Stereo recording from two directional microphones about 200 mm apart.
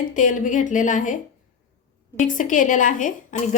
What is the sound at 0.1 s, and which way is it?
A woman's voice, 40° left (ahead or behind).